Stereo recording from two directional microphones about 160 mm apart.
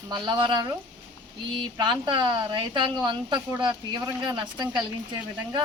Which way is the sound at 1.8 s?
30° right (ahead or behind).